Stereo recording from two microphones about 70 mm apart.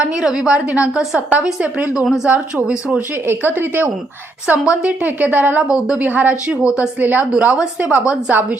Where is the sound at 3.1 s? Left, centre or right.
Right.